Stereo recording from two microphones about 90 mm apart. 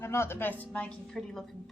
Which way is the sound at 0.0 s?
30° left (ahead or behind).